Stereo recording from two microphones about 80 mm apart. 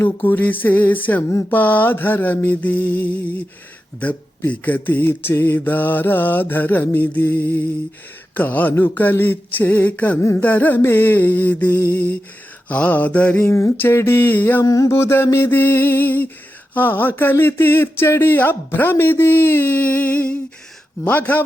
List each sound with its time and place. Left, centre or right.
0.0 s speech: left
4.0 s speech: centre
12.6 s mantra: centre
13.3 s speech: left
14.6 s speech: left